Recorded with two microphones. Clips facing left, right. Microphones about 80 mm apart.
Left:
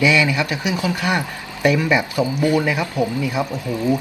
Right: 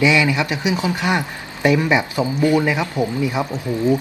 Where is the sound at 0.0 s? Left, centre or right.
Right.